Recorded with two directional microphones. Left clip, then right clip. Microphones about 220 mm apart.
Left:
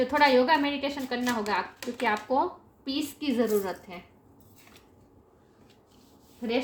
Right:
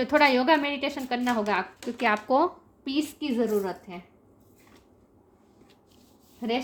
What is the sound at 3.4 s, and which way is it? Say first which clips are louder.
Speech: even; 25° right (ahead or behind).